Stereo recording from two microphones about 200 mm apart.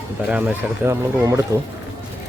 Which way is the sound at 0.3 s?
5° right (ahead or behind).